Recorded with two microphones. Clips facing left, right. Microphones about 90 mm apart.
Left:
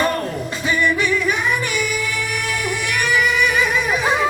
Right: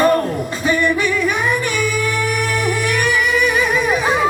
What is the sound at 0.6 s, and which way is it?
Singing, 40° right (ahead or behind).